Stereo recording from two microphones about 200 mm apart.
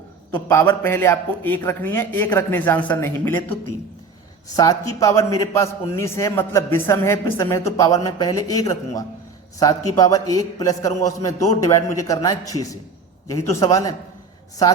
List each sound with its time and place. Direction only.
0.4 s a man's voice: 10° left (ahead or behind)